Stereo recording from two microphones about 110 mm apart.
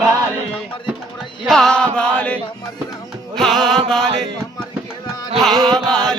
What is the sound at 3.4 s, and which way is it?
Music, centre (ahead or behind).